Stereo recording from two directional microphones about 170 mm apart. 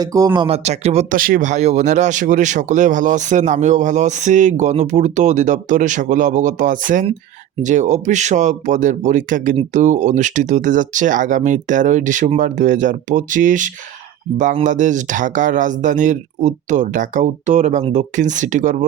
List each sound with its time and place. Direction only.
0.0 s speech: 20° right (ahead or behind)
0.4 s speech: 40° right (ahead or behind)
1.1 s speech: 55° right (ahead or behind)